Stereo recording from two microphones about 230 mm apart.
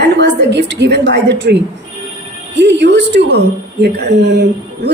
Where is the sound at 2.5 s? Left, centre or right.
Right.